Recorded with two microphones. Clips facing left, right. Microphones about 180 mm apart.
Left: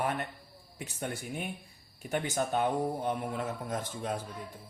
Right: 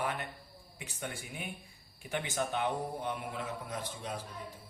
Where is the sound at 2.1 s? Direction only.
45° left (ahead or behind).